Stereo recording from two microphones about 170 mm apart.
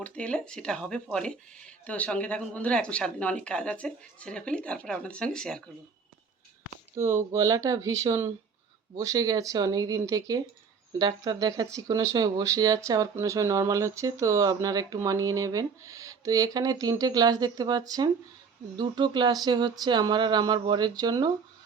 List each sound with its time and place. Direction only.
0.0 s speech: 5° left (ahead or behind)
6.9 s speech: 15° right (ahead or behind)